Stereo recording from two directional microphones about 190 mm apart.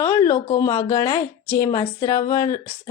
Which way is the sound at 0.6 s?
15° left (ahead or behind).